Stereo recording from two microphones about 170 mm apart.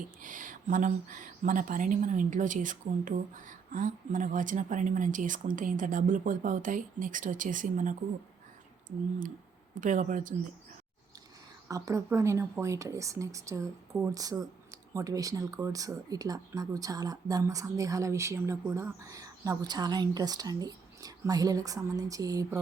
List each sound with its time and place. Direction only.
0.2 s speech: 50° right (ahead or behind)
9.7 s speech: 50° right (ahead or behind)
11.7 s speech: 20° right (ahead or behind)